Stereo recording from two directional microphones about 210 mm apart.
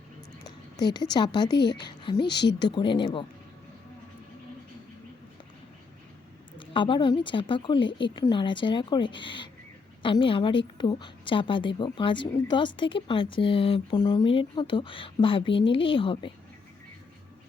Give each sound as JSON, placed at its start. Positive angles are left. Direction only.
{"t": 0.4, "sound": "a sound", "side_deg": 20}
{"t": 1.1, "sound": "a woman's voice", "side_deg": 20}
{"t": 6.6, "sound": "a woman's voice", "side_deg": 25}